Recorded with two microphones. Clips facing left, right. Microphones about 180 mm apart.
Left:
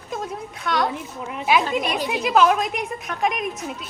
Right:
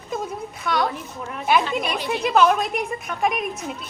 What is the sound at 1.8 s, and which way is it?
Speech, 45° left (ahead or behind).